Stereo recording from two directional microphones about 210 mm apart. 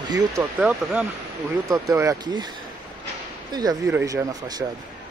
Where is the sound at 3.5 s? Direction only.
20° right (ahead or behind).